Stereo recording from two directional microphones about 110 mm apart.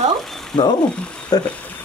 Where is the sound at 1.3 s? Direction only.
35° left (ahead or behind).